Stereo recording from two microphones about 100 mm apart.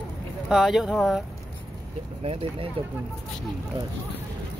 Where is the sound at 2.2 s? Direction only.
65° right (ahead or behind).